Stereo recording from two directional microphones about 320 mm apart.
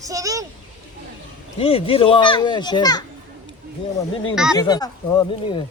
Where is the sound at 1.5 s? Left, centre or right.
Centre.